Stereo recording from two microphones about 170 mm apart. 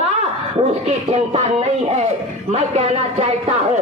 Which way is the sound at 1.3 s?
40° right (ahead or behind).